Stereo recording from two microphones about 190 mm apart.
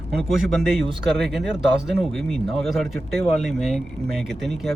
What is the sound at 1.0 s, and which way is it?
A man's voice, centre (ahead or behind).